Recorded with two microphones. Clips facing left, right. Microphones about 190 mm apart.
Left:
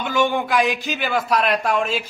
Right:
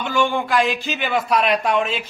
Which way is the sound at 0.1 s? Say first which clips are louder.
Even; 15° left (ahead or behind).